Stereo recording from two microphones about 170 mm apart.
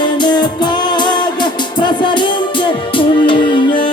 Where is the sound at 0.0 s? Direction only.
25° left (ahead or behind).